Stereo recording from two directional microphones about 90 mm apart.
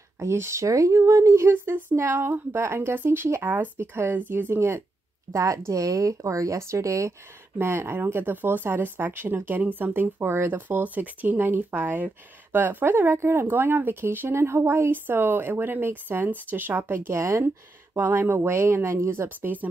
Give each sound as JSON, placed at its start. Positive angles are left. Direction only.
{"t": 0.2, "sound": "speech", "side_deg": -30}